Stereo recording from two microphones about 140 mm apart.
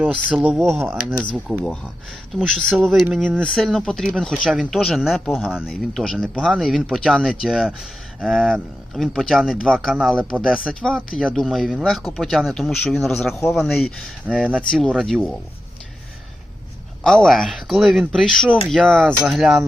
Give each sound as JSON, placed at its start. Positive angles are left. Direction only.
{"t": 0.3, "sound": "speech", "side_deg": -5}
{"t": 17.0, "sound": "speech", "side_deg": 5}